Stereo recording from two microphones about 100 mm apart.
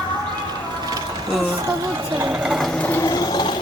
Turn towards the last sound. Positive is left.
turn(degrees=45)  # may be behind; listen again after turning